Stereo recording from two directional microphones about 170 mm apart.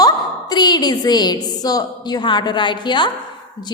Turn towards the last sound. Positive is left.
turn(degrees=25)  # may be behind; listen again after turning